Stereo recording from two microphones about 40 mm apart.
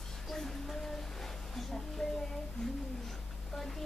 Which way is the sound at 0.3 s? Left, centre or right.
Centre.